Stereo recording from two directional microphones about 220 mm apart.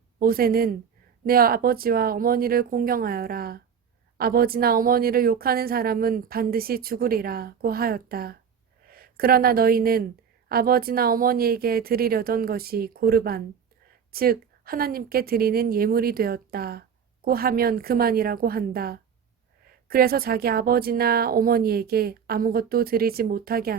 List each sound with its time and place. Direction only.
0.2 s a woman's voice: 40° right (ahead or behind)